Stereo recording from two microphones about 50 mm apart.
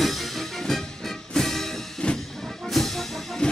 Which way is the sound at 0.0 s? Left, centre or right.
Centre.